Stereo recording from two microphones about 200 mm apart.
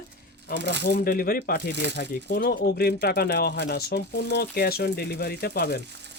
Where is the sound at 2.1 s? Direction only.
45° left (ahead or behind).